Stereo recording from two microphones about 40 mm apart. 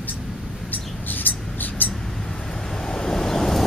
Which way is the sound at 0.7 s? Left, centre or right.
Left.